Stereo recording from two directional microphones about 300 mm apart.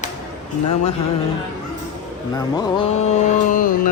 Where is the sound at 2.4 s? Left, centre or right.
Centre.